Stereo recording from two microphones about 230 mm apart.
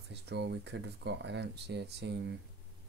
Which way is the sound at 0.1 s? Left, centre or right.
Right.